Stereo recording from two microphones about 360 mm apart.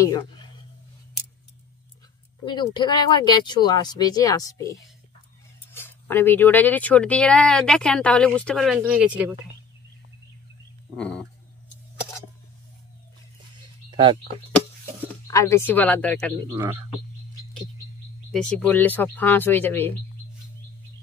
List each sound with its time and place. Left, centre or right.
0.0 s speech: centre
2.4 s speech: centre
11.0 s speech: centre
13.8 s a sound: centre
15.2 s speech: centre
16.4 s speech: centre
18.3 s speech: centre